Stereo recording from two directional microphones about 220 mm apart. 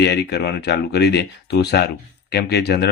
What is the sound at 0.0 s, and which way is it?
Speech, 50° left (ahead or behind).